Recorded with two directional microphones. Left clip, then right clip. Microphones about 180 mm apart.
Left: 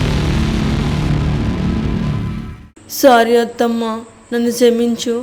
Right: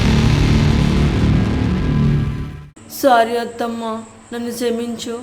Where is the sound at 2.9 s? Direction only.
35° left (ahead or behind).